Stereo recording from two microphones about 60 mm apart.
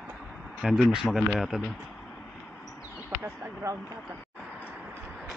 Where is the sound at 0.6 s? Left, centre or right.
Centre.